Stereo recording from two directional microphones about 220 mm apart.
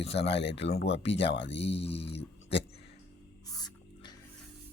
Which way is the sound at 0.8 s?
55° left (ahead or behind).